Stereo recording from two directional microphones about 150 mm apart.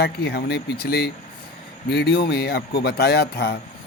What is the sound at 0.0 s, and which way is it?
Speech, 90° left.